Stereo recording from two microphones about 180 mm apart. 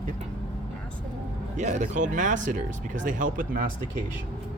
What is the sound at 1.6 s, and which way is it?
Speech, 40° right (ahead or behind).